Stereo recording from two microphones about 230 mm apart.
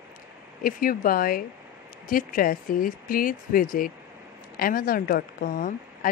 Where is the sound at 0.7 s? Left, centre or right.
Left.